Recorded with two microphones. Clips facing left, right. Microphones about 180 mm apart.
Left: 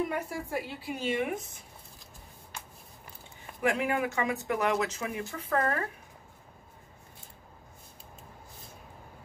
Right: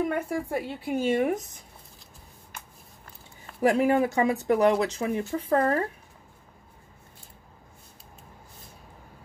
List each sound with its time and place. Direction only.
0.3 s speech: 55° right (ahead or behind)
3.6 s speech: 35° right (ahead or behind)